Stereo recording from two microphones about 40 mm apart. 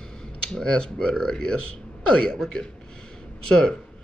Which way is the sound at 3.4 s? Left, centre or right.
Left.